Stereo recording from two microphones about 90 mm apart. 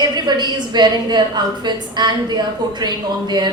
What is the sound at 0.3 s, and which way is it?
A woman's voice, 55° right (ahead or behind).